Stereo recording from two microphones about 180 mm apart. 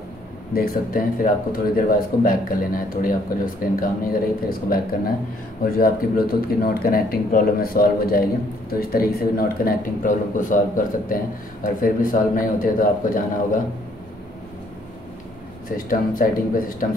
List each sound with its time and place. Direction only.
0.5 s a man's voice: 55° left (ahead or behind)
15.9 s a man's voice: 50° left (ahead or behind)